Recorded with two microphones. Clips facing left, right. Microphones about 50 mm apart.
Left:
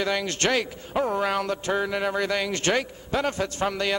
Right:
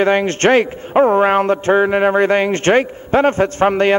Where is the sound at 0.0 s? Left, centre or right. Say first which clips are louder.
Right 11 dB; right.